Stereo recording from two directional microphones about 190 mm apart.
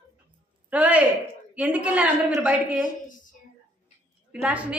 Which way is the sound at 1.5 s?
5° right (ahead or behind).